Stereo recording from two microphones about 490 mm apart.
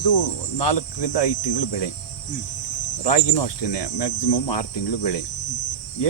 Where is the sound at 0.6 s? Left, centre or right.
Left.